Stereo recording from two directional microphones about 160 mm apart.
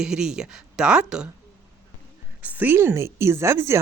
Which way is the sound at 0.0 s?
5° right (ahead or behind).